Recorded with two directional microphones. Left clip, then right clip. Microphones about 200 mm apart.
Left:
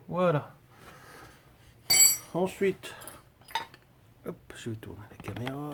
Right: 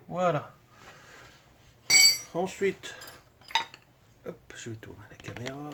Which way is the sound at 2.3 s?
40° left (ahead or behind).